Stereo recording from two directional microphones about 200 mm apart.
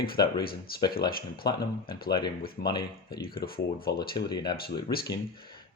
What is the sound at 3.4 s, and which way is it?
Speech, 50° left (ahead or behind).